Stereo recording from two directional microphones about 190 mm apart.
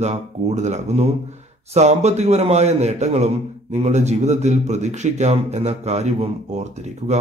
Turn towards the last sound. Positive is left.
turn(degrees=-35)  # may be behind; listen again after turning